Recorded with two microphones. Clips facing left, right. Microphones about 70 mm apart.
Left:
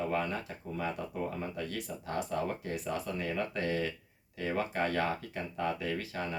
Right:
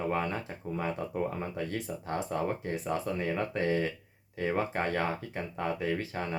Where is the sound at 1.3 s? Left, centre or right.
Right.